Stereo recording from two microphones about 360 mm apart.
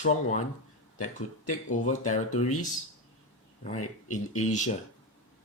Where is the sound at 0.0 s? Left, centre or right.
Centre.